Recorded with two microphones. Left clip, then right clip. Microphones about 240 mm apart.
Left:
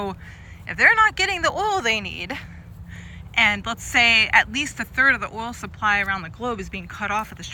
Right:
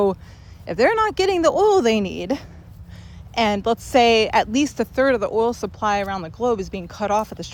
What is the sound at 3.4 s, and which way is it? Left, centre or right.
Speech, centre.